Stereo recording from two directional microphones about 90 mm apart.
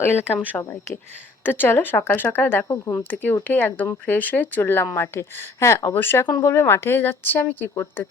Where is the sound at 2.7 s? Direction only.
35° left (ahead or behind).